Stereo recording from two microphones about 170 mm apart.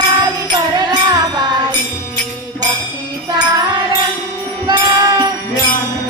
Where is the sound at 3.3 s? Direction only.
25° right (ahead or behind).